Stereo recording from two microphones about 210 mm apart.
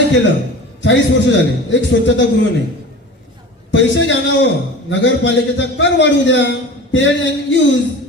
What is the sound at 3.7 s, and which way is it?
A man's voice, 60° left (ahead or behind).